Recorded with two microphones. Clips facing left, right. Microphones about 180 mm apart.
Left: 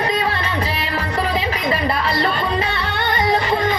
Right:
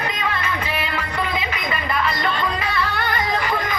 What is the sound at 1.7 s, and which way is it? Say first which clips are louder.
Music: left 2 dB; 30° left (ahead or behind).